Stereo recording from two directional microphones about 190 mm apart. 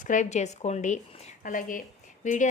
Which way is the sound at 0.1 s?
40° left (ahead or behind).